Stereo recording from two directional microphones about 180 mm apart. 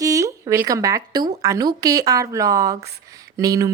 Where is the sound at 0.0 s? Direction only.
20° right (ahead or behind).